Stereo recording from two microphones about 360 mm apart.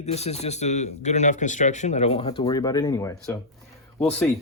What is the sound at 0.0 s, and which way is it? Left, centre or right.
Speech, centre.